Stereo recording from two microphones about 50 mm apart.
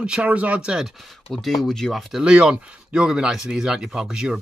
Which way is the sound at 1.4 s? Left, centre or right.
Centre.